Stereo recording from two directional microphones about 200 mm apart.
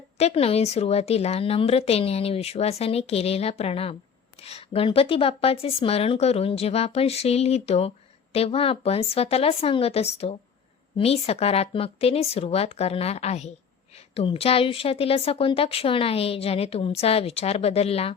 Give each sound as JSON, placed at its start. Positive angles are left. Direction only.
{"t": 0.2, "sound": "a woman's voice", "side_deg": 30}